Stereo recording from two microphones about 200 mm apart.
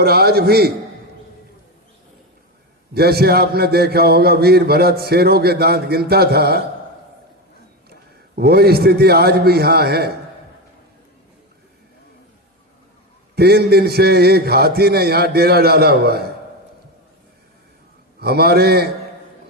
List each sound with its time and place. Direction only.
0.0 s a man's voice: 50° right (ahead or behind)
2.9 s a man's voice: 50° right (ahead or behind)
8.4 s a man's voice: 50° right (ahead or behind)
13.3 s a man's voice: 55° right (ahead or behind)
18.2 s a man's voice: 50° right (ahead or behind)